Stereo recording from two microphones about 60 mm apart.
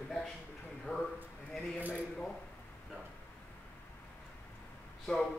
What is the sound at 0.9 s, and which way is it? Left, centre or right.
Speech, left.